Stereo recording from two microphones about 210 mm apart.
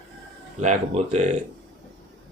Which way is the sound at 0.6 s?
35° right (ahead or behind).